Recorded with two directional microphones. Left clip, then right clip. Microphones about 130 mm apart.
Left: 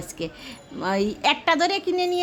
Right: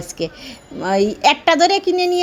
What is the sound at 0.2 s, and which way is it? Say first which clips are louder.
A woman's voice: right 8 dB; 20° right (ahead or behind).